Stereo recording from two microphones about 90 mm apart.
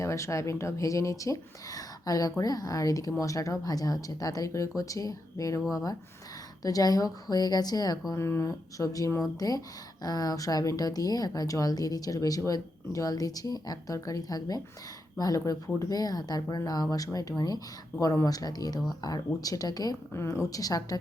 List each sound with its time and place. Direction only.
0.0 s speech: 35° left (ahead or behind)
8.1 s speech: 30° left (ahead or behind)
20.1 s speech: 30° left (ahead or behind)